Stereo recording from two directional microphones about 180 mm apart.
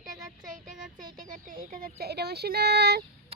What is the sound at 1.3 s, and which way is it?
Speech, 45° right (ahead or behind).